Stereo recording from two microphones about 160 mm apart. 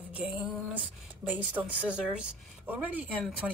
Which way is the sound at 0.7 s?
10° right (ahead or behind).